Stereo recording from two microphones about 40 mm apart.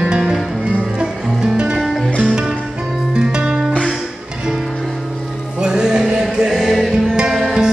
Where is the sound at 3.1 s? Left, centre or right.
Right.